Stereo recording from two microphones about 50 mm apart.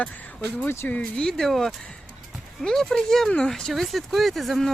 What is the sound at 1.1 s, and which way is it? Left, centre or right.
Speech, centre.